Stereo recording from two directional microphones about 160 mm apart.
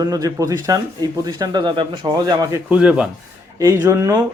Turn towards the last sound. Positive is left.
turn(degrees=-20)  # may be behind; listen again after turning